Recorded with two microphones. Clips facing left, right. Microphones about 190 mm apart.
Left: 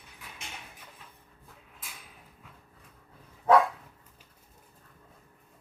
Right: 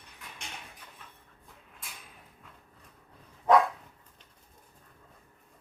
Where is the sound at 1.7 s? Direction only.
Centre (ahead or behind).